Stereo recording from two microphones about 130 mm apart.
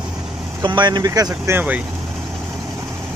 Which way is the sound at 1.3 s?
15° right (ahead or behind).